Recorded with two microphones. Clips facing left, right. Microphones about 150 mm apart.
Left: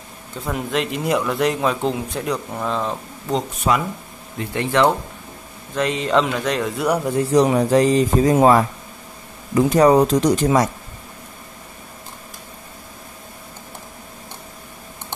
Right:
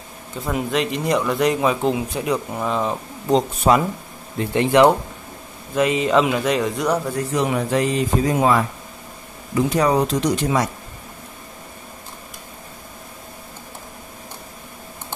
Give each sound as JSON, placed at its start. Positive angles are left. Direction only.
{"t": 0.4, "sound": "speech", "side_deg": 0}
{"t": 3.7, "sound": "speech", "side_deg": -35}
{"t": 4.6, "sound": "speech", "side_deg": -15}
{"t": 5.8, "sound": "speech", "side_deg": -5}
{"t": 6.9, "sound": "speech", "side_deg": 20}
{"t": 7.2, "sound": "speech", "side_deg": 35}
{"t": 9.8, "sound": "speech", "side_deg": 45}